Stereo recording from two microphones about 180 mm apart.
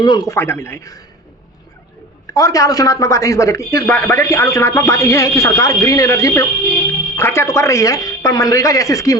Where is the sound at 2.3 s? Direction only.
20° left (ahead or behind).